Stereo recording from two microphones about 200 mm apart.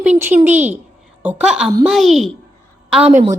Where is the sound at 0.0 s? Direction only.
10° right (ahead or behind).